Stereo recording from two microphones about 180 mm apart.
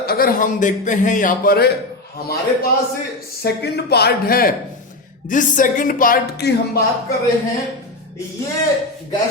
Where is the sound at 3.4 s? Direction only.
65° left (ahead or behind).